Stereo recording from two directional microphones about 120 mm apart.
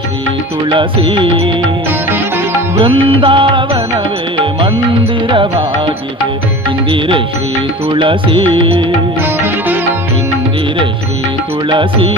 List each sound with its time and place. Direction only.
0.7 s music: 45° right (ahead or behind)
2.0 s music: 20° right (ahead or behind)
2.7 s music: 45° right (ahead or behind)
5.3 s music: 45° right (ahead or behind)
7.9 s music: 45° right (ahead or behind)
11.7 s music: 45° right (ahead or behind)